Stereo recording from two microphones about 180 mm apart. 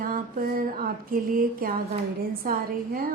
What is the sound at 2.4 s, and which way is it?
Speech, 55° right (ahead or behind).